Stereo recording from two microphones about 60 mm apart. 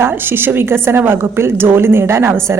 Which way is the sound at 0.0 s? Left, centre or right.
Right.